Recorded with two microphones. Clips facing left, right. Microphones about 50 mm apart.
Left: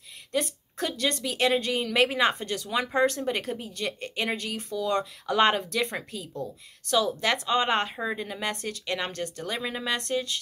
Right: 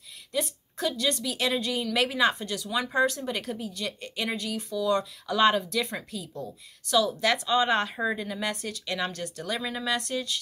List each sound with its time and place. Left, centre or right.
0.3 s a woman's voice: left
7.9 s a woman's voice: centre
8.2 s speech: left